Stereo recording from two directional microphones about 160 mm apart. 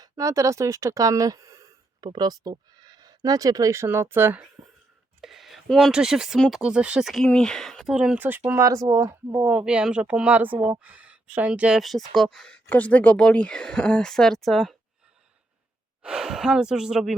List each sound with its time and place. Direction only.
0.0 s speech: 20° right (ahead or behind)
5.2 s speech: centre (ahead or behind); by 9.5 s 20° right (ahead or behind)
9.5 s speech: 5° right (ahead or behind)
16.0 s speech: 5° right (ahead or behind)